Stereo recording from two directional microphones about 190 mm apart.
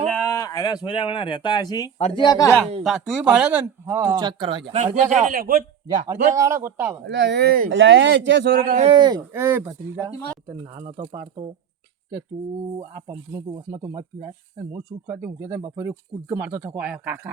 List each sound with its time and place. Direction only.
0.1 s speech: 10° left (ahead or behind)
2.8 s speech: 5° right (ahead or behind); by 5.5 s 50° right (ahead or behind)
6.1 s speech: 15° right (ahead or behind)
7.0 s speech: 65° right (ahead or behind)
7.7 s speech: 70° right (ahead or behind)
8.7 s speech: 35° right (ahead or behind)
9.0 s speech: 20° right (ahead or behind)
10.8 s speech: 35° right (ahead or behind)
13.1 s speech: 20° right (ahead or behind)